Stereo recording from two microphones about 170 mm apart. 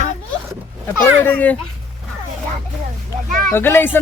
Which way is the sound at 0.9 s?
10° left (ahead or behind).